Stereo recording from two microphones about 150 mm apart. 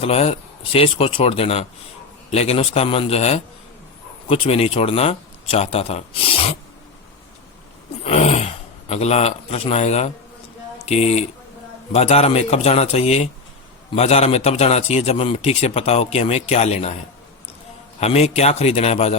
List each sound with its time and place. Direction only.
0.0 s a man's voice: 40° left (ahead or behind)
8.0 s a man's voice: 45° left (ahead or behind)
18.0 s a man's voice: 45° left (ahead or behind)